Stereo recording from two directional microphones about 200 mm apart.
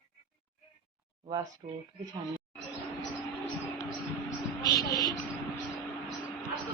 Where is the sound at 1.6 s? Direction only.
35° right (ahead or behind).